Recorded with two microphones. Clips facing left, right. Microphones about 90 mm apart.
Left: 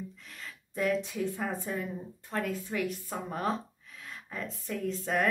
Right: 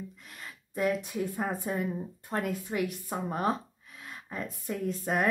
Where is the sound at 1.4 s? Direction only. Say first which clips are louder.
Right 3 dB; 20° right (ahead or behind).